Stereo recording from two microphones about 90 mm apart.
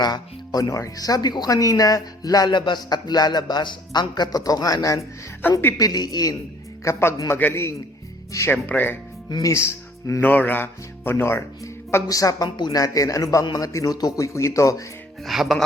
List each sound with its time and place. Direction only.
0.0 s speech: 45° left (ahead or behind)
5.4 s speech: 25° left (ahead or behind)
5.7 s speech: 50° left (ahead or behind)
6.8 s speech: 30° left (ahead or behind)
9.3 s speech: 35° left (ahead or behind)
10.2 s speech: 20° left (ahead or behind)
12.0 s a man's voice: 40° left (ahead or behind)
15.2 s speech: centre (ahead or behind)